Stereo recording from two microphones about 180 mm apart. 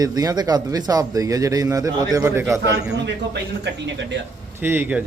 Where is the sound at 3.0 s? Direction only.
70° right (ahead or behind).